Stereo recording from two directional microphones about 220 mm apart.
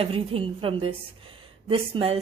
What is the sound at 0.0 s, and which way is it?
Speech, 25° right (ahead or behind).